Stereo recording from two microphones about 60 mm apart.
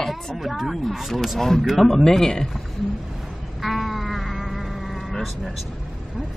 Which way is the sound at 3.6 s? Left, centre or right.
Centre.